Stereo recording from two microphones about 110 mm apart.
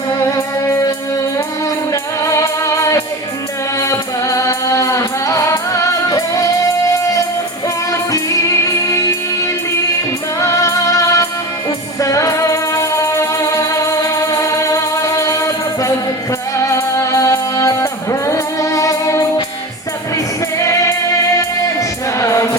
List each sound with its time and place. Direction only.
0.2 s music: 30° left (ahead or behind)